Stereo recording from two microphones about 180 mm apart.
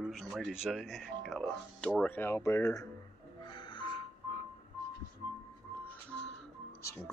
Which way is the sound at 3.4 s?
25° left (ahead or behind).